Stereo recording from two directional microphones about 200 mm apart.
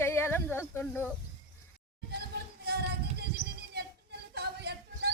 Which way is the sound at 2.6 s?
55° right (ahead or behind).